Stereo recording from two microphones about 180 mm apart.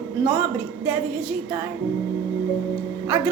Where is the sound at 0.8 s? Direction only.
10° right (ahead or behind).